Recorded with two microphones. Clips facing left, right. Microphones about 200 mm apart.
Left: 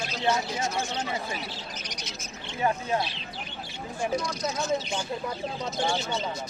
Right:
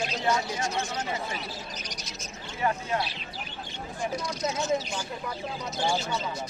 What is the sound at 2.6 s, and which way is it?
Speech, 25° left (ahead or behind).